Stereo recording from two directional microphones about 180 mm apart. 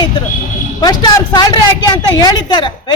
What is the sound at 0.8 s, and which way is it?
A woman's voice, 20° left (ahead or behind).